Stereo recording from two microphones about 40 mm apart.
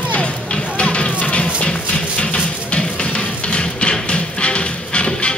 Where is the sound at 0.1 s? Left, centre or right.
Left.